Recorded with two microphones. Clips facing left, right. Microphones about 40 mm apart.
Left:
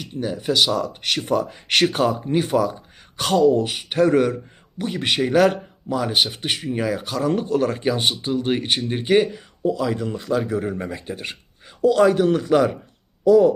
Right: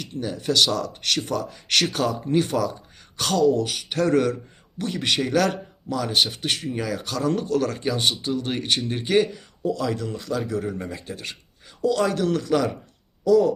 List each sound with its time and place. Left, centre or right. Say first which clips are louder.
0.0 s a man's voice: left 3 dB; centre